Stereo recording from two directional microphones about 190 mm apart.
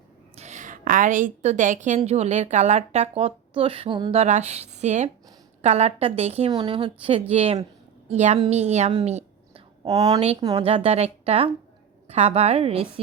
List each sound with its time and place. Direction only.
0.3 s a woman's voice: 40° right (ahead or behind)
9.8 s a woman's voice: 20° right (ahead or behind)